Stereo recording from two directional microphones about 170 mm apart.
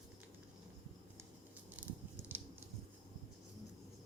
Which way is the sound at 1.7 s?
10° right (ahead or behind).